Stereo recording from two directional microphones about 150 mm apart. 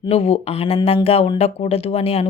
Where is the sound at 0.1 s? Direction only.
45° left (ahead or behind).